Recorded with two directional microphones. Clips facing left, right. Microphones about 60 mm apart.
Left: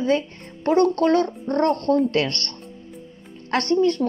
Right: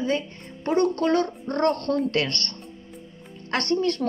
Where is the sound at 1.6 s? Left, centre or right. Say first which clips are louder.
Left 2 dB; right.